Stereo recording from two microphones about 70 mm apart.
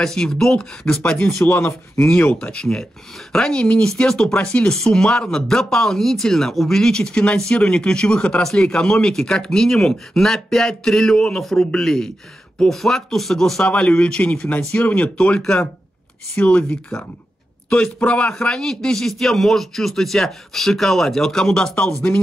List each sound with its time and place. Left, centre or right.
0.0 s speech: centre
1.4 s speech: left
2.0 s a man's voice: centre
21.7 s speech: left